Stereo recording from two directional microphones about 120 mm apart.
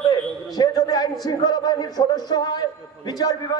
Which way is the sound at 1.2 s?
35° left (ahead or behind).